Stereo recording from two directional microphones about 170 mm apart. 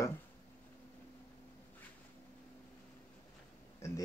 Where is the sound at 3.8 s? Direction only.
15° left (ahead or behind).